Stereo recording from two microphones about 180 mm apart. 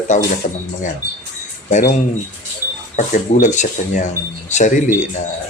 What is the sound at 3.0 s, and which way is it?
Speech, 45° left (ahead or behind).